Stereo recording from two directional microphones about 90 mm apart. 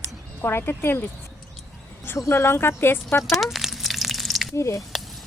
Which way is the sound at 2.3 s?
30° left (ahead or behind).